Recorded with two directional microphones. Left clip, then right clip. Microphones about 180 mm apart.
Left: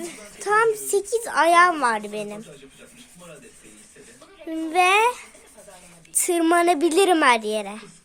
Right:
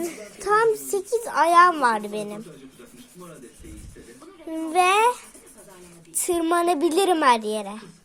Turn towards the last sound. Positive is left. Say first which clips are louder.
# left 2 dB
turn(degrees=20)  # may be behind; listen again after turning